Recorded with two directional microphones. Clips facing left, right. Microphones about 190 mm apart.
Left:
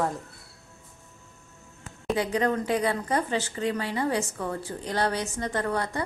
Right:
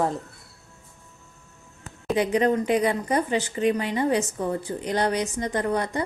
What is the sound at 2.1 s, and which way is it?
Speech, 20° right (ahead or behind).